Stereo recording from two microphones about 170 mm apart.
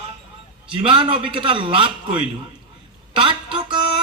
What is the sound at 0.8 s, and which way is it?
A man's voice, 30° right (ahead or behind).